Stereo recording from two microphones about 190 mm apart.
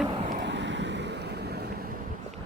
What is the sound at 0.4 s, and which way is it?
Waves, 70° right (ahead or behind).